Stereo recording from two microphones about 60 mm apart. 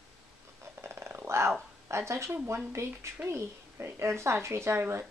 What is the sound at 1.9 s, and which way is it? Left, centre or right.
A child's voice, right.